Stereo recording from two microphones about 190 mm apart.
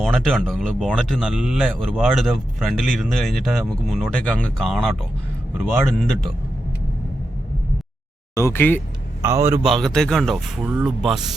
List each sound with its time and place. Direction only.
0.0 s speech: centre (ahead or behind)
8.4 s speech: 15° left (ahead or behind)
9.2 s a man's voice: 15° right (ahead or behind)
9.6 s speech: centre (ahead or behind)